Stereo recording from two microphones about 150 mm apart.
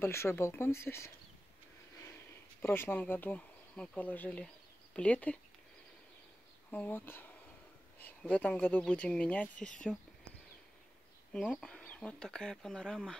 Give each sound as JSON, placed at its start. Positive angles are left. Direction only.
{"t": 0.0, "sound": "speech", "side_deg": 20}
{"t": 2.6, "sound": "speech", "side_deg": 15}
{"t": 6.7, "sound": "speech", "side_deg": 10}
{"t": 11.3, "sound": "speech", "side_deg": 5}